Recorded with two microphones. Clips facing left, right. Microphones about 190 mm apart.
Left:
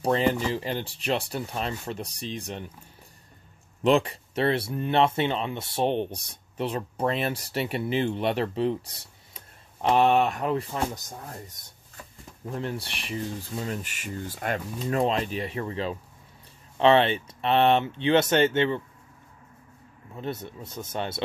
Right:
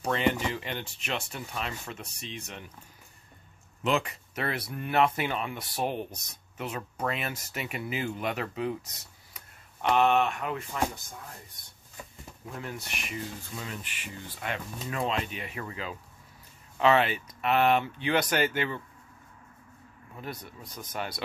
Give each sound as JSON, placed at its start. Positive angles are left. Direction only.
{"t": 0.0, "sound": "speech", "side_deg": 35}
{"t": 3.8, "sound": "speech", "side_deg": 30}
{"t": 12.5, "sound": "speech", "side_deg": 30}
{"t": 20.2, "sound": "speech", "side_deg": 25}